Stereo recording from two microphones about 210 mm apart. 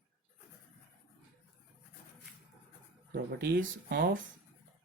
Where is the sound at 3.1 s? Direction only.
50° right (ahead or behind).